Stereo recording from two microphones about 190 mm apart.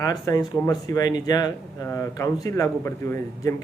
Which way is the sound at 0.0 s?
20° left (ahead or behind).